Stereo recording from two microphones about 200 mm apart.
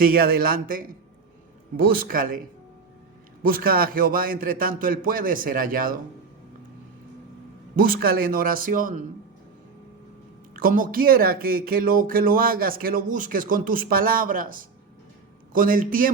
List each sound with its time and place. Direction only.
0.0 s speech: 50° right (ahead or behind)
3.4 s speech: 45° right (ahead or behind)
7.8 s speech: 50° right (ahead or behind)
10.5 s speech: 45° right (ahead or behind)